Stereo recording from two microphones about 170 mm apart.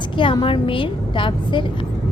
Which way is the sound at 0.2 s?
30° left (ahead or behind).